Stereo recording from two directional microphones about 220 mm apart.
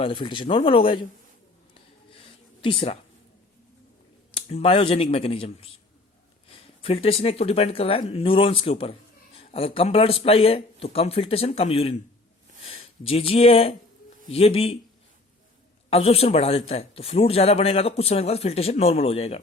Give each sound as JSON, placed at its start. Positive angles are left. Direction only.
{"t": 0.0, "sound": "speech", "side_deg": 25}
{"t": 2.0, "sound": "a sound", "side_deg": 25}
{"t": 4.4, "sound": "speech", "side_deg": 25}
{"t": 15.9, "sound": "speech", "side_deg": 25}